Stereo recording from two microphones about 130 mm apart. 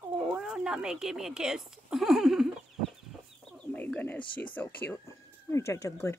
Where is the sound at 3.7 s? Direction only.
10° left (ahead or behind).